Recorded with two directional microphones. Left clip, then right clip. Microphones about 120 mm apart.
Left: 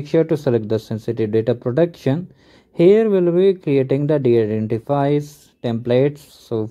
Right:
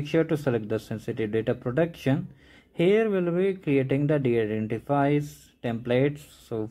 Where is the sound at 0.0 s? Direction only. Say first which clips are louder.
Left 8 dB; 30° left (ahead or behind).